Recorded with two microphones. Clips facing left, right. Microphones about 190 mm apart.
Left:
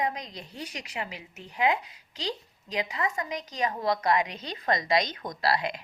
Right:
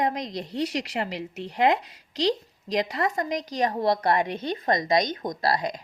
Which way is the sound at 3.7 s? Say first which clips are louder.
Right 3 dB; 35° right (ahead or behind).